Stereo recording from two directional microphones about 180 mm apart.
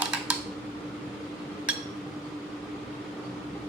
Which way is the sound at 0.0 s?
5° right (ahead or behind).